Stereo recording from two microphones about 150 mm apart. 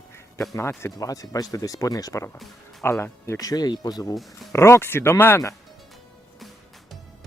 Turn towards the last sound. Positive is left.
turn(degrees=20)  # may be behind; listen again after turning